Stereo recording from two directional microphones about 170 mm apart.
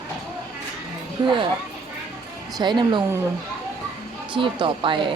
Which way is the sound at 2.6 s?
25° right (ahead or behind).